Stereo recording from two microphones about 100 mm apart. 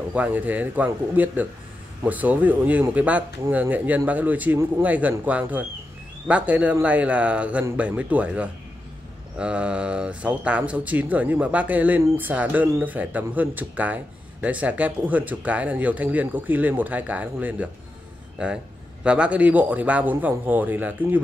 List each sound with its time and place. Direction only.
0.1 s speech: 15° right (ahead or behind)